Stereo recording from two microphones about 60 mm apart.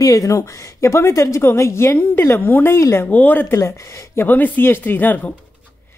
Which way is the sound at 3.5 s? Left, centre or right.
Left.